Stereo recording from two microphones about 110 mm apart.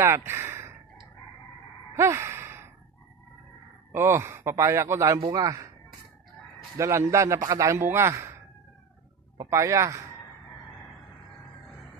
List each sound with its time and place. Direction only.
0.0 s speech: 25° right (ahead or behind)
2.0 s sigh: 25° right (ahead or behind)
3.9 s a man's voice: 25° right (ahead or behind)
6.8 s a man's voice: 25° right (ahead or behind)
9.4 s a man's voice: 30° right (ahead or behind)